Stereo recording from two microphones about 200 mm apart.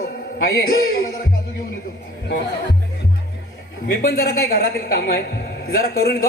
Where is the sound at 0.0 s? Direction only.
50° left (ahead or behind).